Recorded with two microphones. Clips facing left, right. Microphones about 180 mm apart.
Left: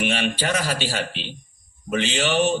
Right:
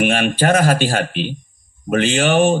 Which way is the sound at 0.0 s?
50° right (ahead or behind).